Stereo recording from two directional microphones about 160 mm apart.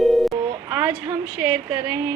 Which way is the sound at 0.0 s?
Centre (ahead or behind).